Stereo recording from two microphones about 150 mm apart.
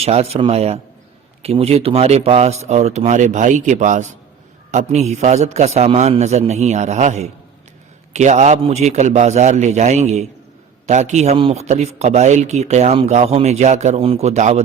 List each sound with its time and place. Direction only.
0.0 s speech: 45° right (ahead or behind)